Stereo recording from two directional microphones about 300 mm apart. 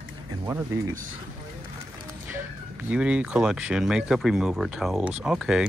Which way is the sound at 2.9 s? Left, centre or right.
Centre.